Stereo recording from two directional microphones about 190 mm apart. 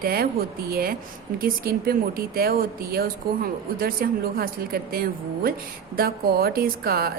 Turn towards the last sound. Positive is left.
turn(degrees=-55)  # may be behind; listen again after turning